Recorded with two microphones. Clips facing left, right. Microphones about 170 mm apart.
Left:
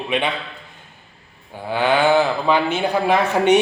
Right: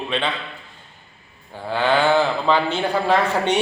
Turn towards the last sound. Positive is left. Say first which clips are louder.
# left 3 dB
turn(degrees=15)  # may be behind; listen again after turning